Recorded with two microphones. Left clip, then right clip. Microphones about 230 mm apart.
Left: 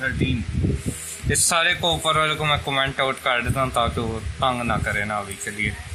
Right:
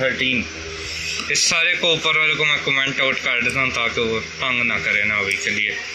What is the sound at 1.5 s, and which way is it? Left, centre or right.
Speech, centre.